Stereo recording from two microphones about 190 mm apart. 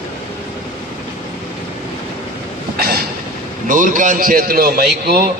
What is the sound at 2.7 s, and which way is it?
Train, 50° right (ahead or behind).